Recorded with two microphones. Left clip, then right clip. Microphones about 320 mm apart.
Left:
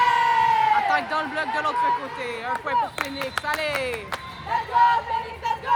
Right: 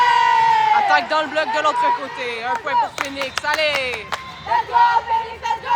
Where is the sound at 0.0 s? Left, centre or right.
Right.